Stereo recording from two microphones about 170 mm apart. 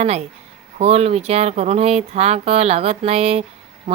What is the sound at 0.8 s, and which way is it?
Speech, 40° right (ahead or behind).